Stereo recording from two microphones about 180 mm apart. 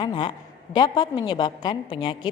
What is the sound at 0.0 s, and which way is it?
A woman's voice, 25° left (ahead or behind).